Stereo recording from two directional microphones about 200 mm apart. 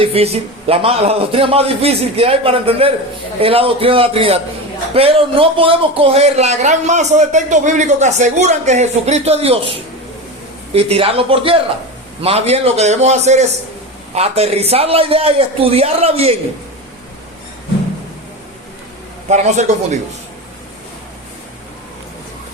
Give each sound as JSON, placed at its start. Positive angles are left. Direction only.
{"t": 0.0, "sound": "a man's voice", "side_deg": -30}
{"t": 19.3, "sound": "speech", "side_deg": -35}